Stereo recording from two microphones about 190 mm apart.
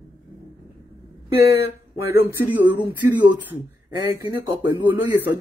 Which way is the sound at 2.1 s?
10° right (ahead or behind).